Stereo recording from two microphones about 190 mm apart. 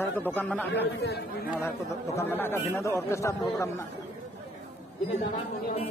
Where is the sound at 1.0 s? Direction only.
60° left (ahead or behind).